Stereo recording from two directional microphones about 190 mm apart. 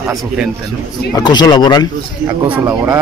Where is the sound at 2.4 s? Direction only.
15° right (ahead or behind).